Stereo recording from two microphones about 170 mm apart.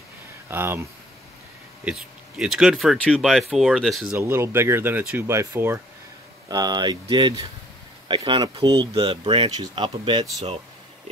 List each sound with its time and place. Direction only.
0.5 s speech: 15° right (ahead or behind)
1.9 s speech: 5° right (ahead or behind); by 10.2 s 30° right (ahead or behind)